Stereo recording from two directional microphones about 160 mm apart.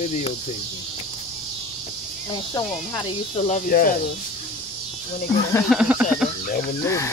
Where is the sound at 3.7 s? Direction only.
60° left (ahead or behind).